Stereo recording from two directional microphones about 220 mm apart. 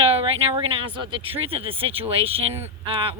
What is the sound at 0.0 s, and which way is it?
Speech, 25° right (ahead or behind).